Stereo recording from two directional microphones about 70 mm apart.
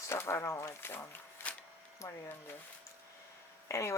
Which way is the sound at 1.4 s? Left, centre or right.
Left.